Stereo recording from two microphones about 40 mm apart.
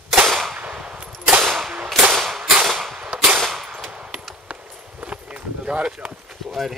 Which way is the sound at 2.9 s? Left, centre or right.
Right.